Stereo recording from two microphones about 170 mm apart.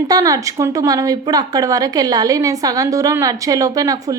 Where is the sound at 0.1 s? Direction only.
20° right (ahead or behind).